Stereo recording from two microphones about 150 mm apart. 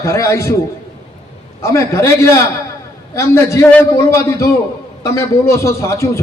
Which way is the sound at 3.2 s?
20° left (ahead or behind).